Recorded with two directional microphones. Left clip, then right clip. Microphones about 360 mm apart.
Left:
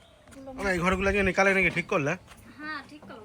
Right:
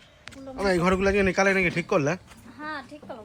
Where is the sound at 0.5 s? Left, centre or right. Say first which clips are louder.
Right 4 dB; centre.